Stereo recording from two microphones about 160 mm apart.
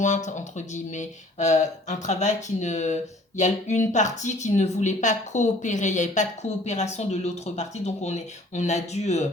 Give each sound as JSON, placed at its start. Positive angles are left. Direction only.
{"t": 0.0, "sound": "speech", "side_deg": 50}